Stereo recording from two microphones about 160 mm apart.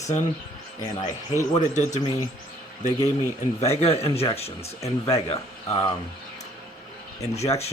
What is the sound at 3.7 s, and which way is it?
Speech, 35° left (ahead or behind).